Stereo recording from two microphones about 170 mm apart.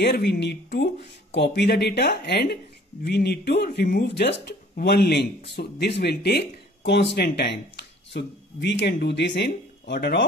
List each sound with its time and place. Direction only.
0.0 s speech: 75° left (ahead or behind)